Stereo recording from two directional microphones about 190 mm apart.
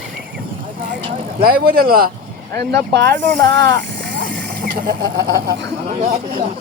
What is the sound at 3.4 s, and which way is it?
Speech, 60° right (ahead or behind).